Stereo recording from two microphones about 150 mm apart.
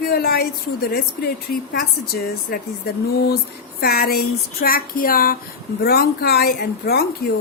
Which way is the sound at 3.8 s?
90° left.